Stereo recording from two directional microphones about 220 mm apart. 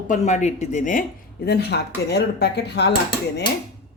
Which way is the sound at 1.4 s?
50° left (ahead or behind).